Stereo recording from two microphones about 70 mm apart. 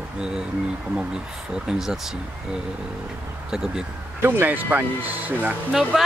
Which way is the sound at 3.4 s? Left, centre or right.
Centre.